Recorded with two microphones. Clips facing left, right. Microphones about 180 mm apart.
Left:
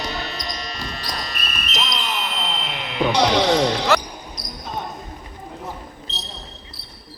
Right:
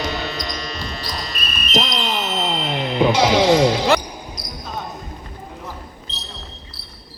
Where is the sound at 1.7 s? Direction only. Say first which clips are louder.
Right 6 dB; 30° right (ahead or behind).